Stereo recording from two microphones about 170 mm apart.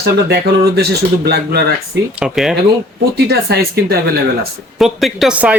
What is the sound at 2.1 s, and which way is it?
Speech, 5° right (ahead or behind).